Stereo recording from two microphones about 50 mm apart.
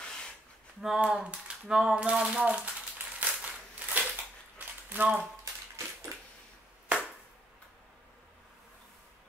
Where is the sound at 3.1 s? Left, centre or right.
Right.